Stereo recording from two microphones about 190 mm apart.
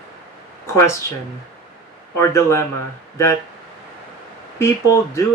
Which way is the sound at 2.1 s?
15° left (ahead or behind).